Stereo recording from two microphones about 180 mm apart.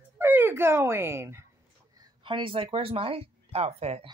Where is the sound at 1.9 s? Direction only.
30° right (ahead or behind).